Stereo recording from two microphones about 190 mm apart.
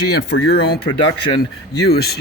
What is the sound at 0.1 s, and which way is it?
Speech, 55° left (ahead or behind).